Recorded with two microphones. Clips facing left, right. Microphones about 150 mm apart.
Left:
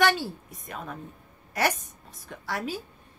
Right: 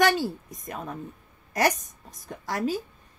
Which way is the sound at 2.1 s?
45° right (ahead or behind).